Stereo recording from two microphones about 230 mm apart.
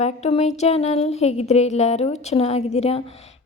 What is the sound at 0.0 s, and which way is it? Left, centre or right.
A woman's voice, left.